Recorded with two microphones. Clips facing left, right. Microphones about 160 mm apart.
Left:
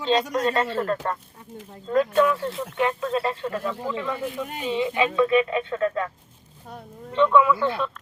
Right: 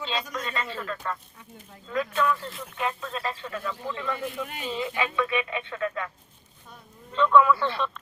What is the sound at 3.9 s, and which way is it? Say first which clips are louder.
Speech: left 3 dB; 10° left (ahead or behind).